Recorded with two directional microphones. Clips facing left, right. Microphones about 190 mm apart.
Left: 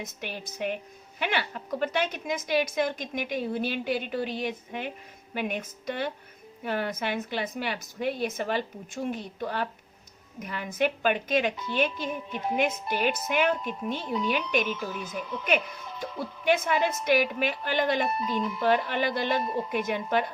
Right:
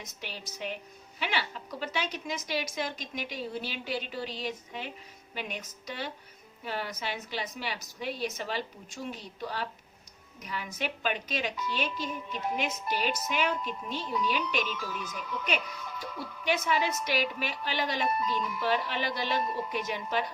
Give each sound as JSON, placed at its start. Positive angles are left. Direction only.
{"t": 0.0, "sound": "a woman's voice", "side_deg": 55}